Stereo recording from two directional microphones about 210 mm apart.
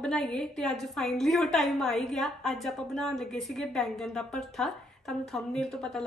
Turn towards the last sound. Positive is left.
turn(degrees=0)  # may be behind; listen again after turning